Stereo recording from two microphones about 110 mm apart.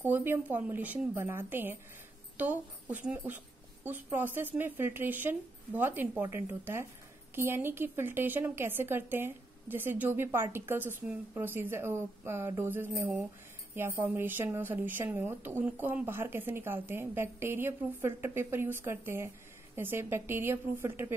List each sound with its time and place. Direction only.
0.0 s a woman's voice: 15° right (ahead or behind)